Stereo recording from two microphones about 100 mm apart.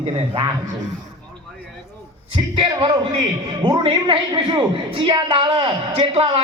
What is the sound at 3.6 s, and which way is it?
A man's voice, 45° right (ahead or behind).